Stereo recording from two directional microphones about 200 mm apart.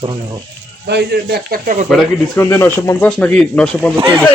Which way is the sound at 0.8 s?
55° right (ahead or behind).